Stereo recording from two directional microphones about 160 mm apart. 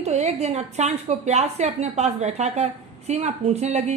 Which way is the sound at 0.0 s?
45° right (ahead or behind).